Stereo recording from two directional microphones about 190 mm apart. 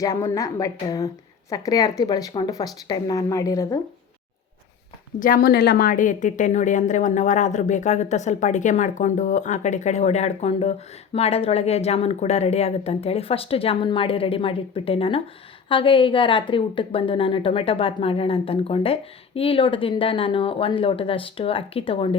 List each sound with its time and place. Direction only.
0.0 s a woman's voice: 15° left (ahead or behind)
5.2 s a woman's voice: 50° left (ahead or behind); by 22.1 s 30° left (ahead or behind)